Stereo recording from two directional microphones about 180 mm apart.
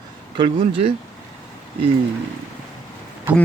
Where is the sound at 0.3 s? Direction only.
30° right (ahead or behind).